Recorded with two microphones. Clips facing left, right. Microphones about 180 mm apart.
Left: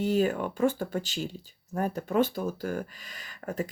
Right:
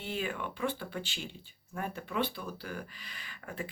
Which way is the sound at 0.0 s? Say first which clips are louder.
Left 11 dB; 40° left (ahead or behind).